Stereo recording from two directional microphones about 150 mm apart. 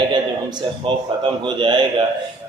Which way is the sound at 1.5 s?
30° right (ahead or behind).